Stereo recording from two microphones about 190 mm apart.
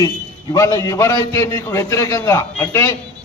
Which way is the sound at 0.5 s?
15° left (ahead or behind).